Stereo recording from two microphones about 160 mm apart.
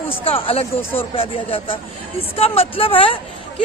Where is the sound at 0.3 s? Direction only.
35° left (ahead or behind).